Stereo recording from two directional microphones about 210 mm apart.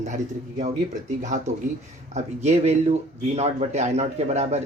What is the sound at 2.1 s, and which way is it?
Speech, 30° right (ahead or behind).